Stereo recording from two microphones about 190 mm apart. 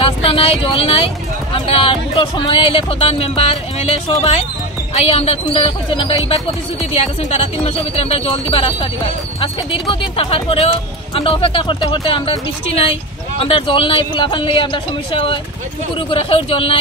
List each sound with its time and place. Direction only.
0.0 s a sound: 30° left (ahead or behind)
1.5 s speech: 30° left (ahead or behind)
7.6 s speech: 30° left (ahead or behind)